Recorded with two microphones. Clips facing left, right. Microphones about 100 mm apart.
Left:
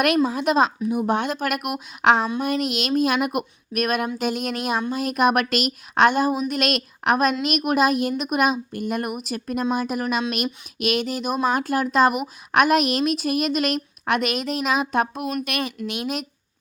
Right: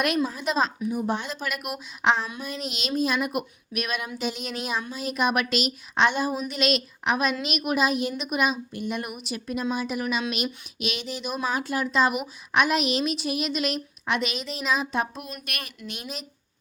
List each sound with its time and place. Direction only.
0.0 s a woman's voice: 60° left (ahead or behind)